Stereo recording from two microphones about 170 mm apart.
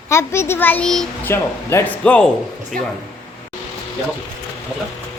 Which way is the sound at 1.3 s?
15° left (ahead or behind).